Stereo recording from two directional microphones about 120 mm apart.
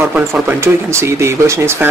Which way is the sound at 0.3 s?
20° right (ahead or behind).